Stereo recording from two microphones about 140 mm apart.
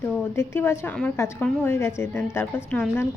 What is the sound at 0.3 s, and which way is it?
A woman's voice, 15° left (ahead or behind).